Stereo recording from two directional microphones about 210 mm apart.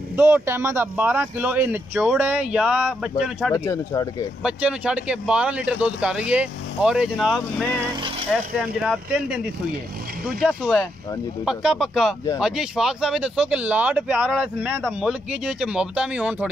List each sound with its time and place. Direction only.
0.1 s speech: 10° right (ahead or behind)
3.5 s speech: 15° left (ahead or behind)
4.4 s speech: 5° right (ahead or behind)
8.8 s speech: 5° right (ahead or behind)
10.4 s speech: centre (ahead or behind)